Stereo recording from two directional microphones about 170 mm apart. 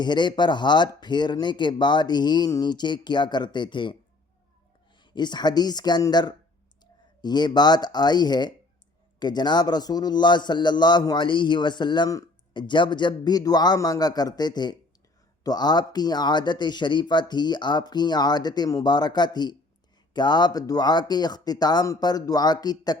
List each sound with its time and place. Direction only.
0.0 s a man's voice: 25° left (ahead or behind)
4.9 s a man's voice: 25° left (ahead or behind)